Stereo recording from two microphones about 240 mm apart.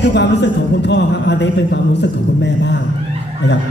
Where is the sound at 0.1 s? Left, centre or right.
Left.